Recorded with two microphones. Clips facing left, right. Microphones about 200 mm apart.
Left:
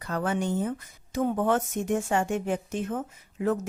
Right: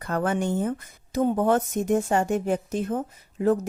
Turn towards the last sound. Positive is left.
turn(degrees=-35)  # may be behind; listen again after turning